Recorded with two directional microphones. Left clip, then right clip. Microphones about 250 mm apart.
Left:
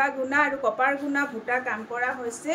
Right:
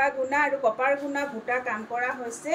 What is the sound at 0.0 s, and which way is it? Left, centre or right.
A woman's voice, centre.